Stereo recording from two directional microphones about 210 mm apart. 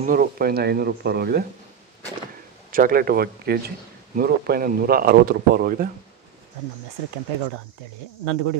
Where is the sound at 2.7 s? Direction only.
40° right (ahead or behind).